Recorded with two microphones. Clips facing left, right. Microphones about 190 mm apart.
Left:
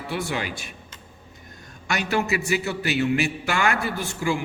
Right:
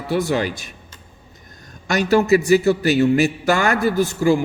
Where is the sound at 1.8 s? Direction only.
40° right (ahead or behind).